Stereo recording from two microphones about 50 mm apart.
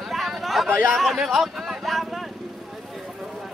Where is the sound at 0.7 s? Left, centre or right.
Right.